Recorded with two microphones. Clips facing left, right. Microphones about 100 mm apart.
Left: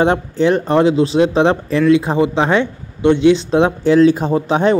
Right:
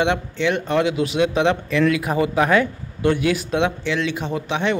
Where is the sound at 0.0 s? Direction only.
40° left (ahead or behind).